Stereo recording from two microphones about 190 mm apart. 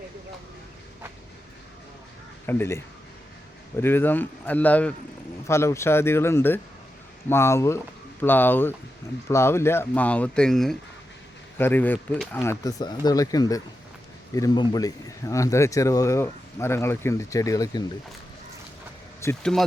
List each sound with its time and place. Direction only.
2.5 s speech: 10° left (ahead or behind)
19.2 s speech: 15° left (ahead or behind)